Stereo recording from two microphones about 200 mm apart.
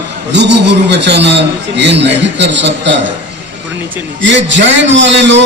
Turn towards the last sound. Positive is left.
turn(degrees=-65)  # may be behind; listen again after turning